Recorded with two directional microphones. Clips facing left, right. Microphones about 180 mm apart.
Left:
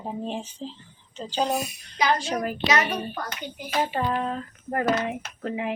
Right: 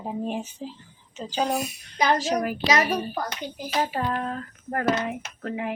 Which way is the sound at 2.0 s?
40° right (ahead or behind).